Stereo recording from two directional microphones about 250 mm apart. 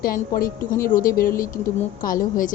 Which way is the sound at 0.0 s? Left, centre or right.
Left.